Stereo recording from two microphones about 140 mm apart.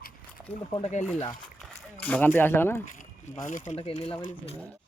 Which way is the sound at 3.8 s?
40° left (ahead or behind).